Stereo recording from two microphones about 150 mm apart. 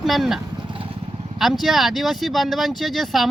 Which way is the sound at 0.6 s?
35° right (ahead or behind).